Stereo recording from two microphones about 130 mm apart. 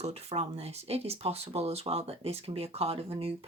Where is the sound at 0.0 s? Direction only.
50° right (ahead or behind).